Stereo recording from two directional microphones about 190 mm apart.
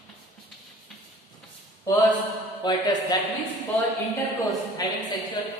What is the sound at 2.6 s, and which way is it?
Speech, 25° left (ahead or behind).